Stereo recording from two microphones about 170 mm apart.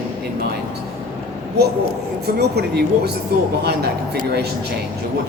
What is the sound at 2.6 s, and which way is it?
Speech, 75° right (ahead or behind).